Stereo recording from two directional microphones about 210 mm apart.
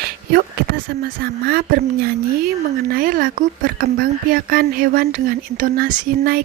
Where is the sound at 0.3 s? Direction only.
45° right (ahead or behind).